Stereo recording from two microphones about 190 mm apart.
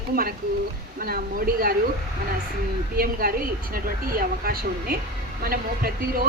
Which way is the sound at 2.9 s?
50° right (ahead or behind).